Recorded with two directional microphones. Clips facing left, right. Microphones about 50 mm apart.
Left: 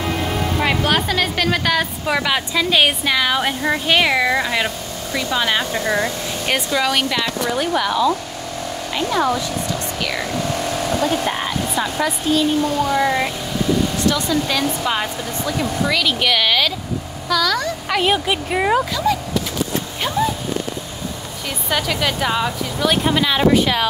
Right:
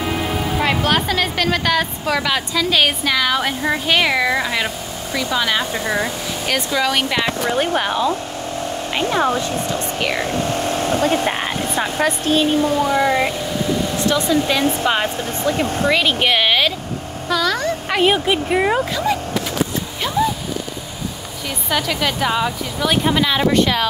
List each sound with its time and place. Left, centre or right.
0.6 s a woman's voice: centre
5.7 s a woman's voice: centre
7.5 s speech: right
12.7 s a woman's voice: centre
13.9 s speech: right
14.6 s speech: right
17.8 s a woman's voice: centre
21.6 s a woman's voice: centre